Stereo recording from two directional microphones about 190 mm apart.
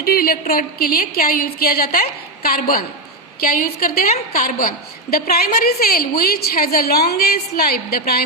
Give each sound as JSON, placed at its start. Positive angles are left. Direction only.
{"t": 0.0, "sound": "a woman's voice", "side_deg": 55}